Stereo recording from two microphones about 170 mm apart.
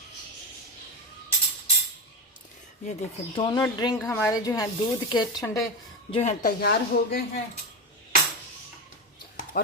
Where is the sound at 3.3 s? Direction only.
30° left (ahead or behind).